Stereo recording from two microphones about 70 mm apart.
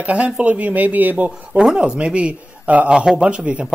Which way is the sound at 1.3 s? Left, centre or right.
Centre.